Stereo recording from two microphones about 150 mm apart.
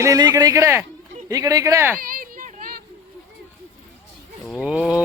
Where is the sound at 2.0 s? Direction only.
70° right (ahead or behind).